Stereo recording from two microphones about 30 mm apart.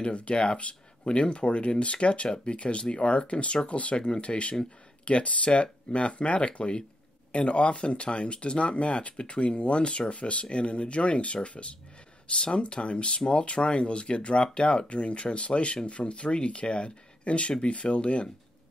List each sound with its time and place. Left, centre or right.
0.0 s speech: left
3.9 s speech: left
12.4 s speech: left